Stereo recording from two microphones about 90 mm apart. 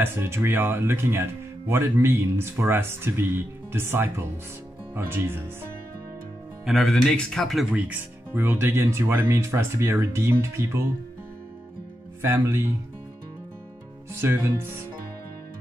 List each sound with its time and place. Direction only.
0.0 s speech: 25° right (ahead or behind)
6.6 s speech: centre (ahead or behind)
7.7 s speech: 20° right (ahead or behind)
12.2 s speech: 30° right (ahead or behind)
14.2 s speech: 25° right (ahead or behind)